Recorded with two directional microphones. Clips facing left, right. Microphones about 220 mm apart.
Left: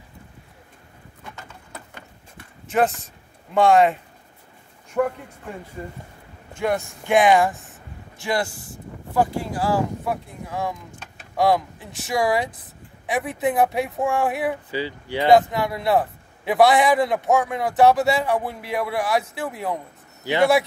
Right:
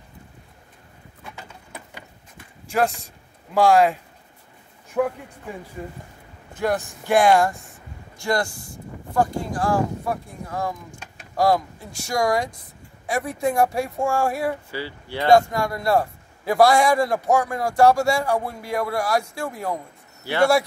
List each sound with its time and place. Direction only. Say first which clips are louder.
2.7 s a man's voice: left 2 dB; centre (ahead or behind)
6.6 s a man's voice: even; centre (ahead or behind)
14.7 s speech: left 4 dB; 15° left (ahead or behind)
15.3 s a man's voice: even; 5° left (ahead or behind)
20.2 s speech: left 3 dB; 15° left (ahead or behind)